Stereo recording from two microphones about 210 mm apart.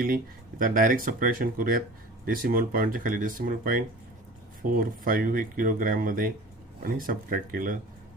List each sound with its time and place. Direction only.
0.6 s speech: 40° right (ahead or behind)